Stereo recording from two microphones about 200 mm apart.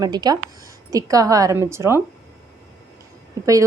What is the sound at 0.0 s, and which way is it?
A woman's voice, 20° right (ahead or behind).